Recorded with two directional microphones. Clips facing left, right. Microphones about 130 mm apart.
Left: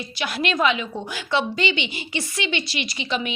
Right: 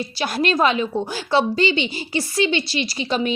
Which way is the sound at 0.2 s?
35° right (ahead or behind).